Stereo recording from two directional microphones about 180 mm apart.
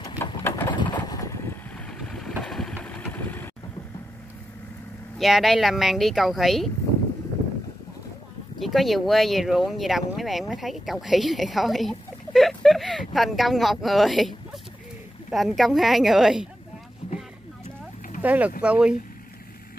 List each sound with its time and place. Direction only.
0.0 s vehicle: 15° left (ahead or behind)
0.7 s vehicle: 25° left (ahead or behind)
1.9 s vehicle: 5° left (ahead or behind)
5.2 s a woman's voice: centre (ahead or behind)
8.5 s a woman's voice: centre (ahead or behind)
17.0 s boat: 30° left (ahead or behind)
18.2 s a woman's voice: 10° right (ahead or behind)